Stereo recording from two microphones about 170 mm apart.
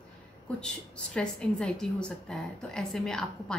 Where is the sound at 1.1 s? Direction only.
5° left (ahead or behind).